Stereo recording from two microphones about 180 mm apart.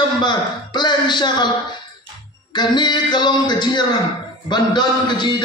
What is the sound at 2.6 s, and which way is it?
A man's voice, 25° left (ahead or behind).